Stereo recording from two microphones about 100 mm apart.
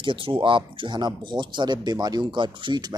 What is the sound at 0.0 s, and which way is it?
Speech, 60° right (ahead or behind).